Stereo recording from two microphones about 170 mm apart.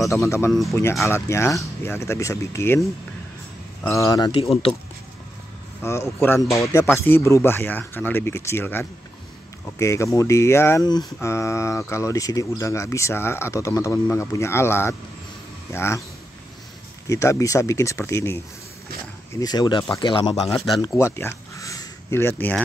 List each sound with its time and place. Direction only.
0.1 s speech: 15° left (ahead or behind)
3.9 s speech: 20° left (ahead or behind)
5.8 s speech: 15° left (ahead or behind)
17.1 s speech: 20° left (ahead or behind)
19.4 s speech: 25° left (ahead or behind)
21.0 s a sound: 15° left (ahead or behind)